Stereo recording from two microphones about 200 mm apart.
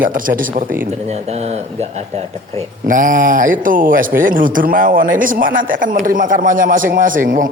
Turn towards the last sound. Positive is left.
turn(degrees=-45)  # may be behind; listen again after turning